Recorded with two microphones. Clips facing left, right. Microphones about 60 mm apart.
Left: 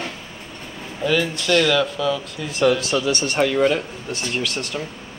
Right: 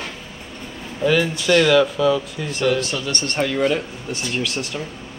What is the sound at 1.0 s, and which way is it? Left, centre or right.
Speech, centre.